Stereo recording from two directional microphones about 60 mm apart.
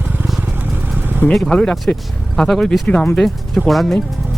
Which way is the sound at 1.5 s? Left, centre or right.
Centre.